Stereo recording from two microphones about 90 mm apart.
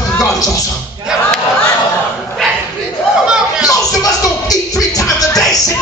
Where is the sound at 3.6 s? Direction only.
40° left (ahead or behind).